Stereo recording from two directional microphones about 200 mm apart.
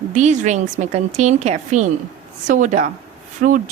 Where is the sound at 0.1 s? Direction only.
35° right (ahead or behind).